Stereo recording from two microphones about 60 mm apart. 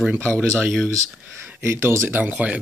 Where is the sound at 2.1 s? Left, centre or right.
Right.